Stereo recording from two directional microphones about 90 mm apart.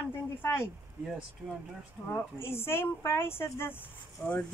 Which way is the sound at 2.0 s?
25° left (ahead or behind).